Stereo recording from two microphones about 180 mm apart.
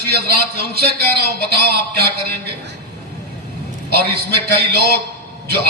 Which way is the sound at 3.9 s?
65° right (ahead or behind).